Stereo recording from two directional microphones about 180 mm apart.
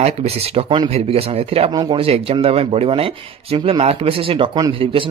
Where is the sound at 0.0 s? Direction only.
35° right (ahead or behind).